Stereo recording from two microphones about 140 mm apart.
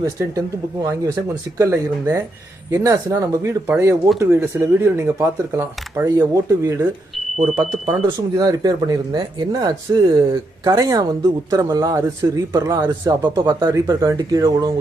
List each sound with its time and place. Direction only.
0.0 s speech: 25° right (ahead or behind)
7.4 s speech: 10° right (ahead or behind)
8.4 s speech: 30° right (ahead or behind)
13.7 s speech: 25° right (ahead or behind)